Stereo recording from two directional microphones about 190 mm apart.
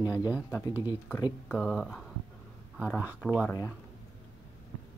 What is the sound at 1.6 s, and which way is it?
Speech, 5° right (ahead or behind).